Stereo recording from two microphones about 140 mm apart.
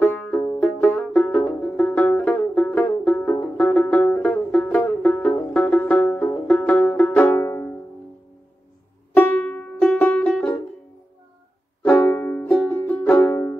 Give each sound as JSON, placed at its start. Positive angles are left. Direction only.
{"t": 0.0, "sound": "music", "side_deg": 10}
{"t": 9.1, "sound": "music", "side_deg": 10}
{"t": 11.8, "sound": "music", "side_deg": 15}